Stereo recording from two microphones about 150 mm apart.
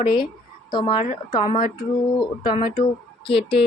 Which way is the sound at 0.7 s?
30° left (ahead or behind).